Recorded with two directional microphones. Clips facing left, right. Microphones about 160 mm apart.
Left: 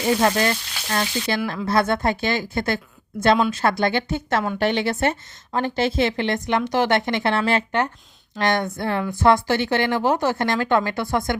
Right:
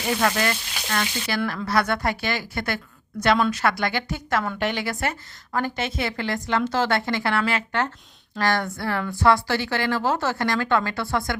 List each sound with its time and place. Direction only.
0.2 s a woman's voice: 25° left (ahead or behind)